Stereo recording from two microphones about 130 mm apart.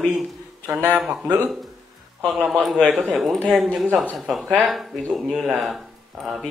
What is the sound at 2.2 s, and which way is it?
Speech, 5° right (ahead or behind).